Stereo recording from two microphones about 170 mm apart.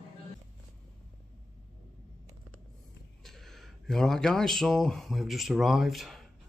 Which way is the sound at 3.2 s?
Centre (ahead or behind).